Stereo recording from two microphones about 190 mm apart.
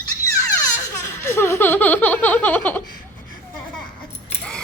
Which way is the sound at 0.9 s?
10° left (ahead or behind).